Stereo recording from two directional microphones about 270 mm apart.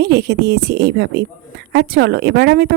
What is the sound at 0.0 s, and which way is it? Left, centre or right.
Speech, right.